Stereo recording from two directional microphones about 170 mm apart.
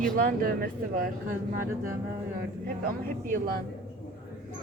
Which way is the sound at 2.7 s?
60° right (ahead or behind).